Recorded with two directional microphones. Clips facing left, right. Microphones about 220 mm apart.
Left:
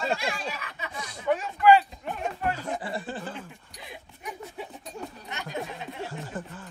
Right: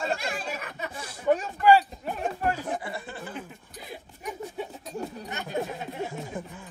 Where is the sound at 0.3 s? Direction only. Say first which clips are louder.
Even; 50° right (ahead or behind).